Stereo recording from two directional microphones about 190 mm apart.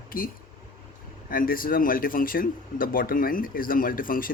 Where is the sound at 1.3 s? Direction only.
50° left (ahead or behind).